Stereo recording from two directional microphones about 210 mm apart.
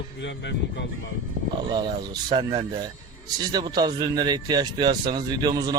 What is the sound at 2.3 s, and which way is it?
Speech, 25° right (ahead or behind).